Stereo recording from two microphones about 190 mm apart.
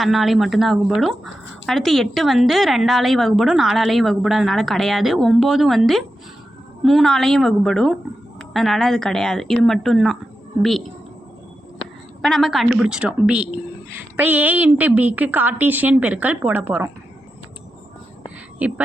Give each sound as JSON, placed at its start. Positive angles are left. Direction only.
{"t": 0.0, "sound": "a woman's voice", "side_deg": 0}
{"t": 12.2, "sound": "a woman's voice", "side_deg": 0}
{"t": 18.6, "sound": "a woman's voice", "side_deg": -10}